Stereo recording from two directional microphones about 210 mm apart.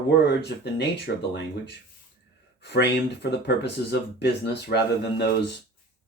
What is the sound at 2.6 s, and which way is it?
Speech, 55° left (ahead or behind).